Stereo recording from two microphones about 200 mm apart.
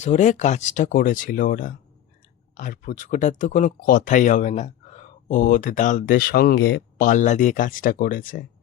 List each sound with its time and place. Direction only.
0.0 s speech: 35° left (ahead or behind)